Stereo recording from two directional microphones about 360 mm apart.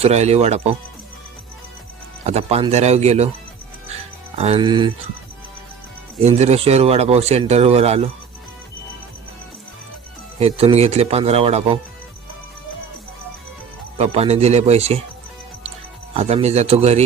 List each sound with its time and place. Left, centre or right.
0.0 s speech: centre
2.2 s speech: centre
4.4 s speech: centre
6.2 s speech: centre
10.3 s speech: centre
14.0 s speech: centre
16.1 s speech: centre